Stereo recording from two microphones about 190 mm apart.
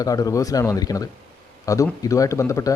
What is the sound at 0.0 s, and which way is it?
Speech, 20° left (ahead or behind).